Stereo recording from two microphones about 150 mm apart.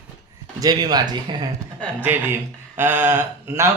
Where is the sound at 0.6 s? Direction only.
25° right (ahead or behind).